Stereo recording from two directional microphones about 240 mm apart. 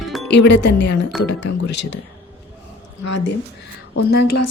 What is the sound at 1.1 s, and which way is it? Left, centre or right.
Speech, centre.